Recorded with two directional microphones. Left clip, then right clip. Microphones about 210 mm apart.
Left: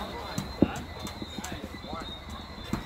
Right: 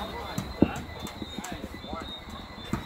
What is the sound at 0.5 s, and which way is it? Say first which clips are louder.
Clip-clop: right 1 dB; 30° right (ahead or behind).